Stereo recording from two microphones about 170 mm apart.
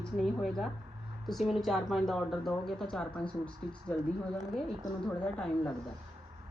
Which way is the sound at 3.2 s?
30° left (ahead or behind).